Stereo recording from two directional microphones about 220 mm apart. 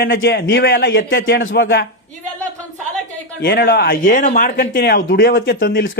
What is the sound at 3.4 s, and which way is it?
Speech, 55° left (ahead or behind).